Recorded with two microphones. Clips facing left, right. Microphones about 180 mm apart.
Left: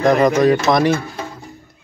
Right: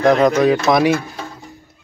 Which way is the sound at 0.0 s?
Centre (ahead or behind).